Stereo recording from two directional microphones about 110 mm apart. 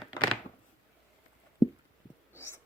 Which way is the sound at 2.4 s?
20° left (ahead or behind).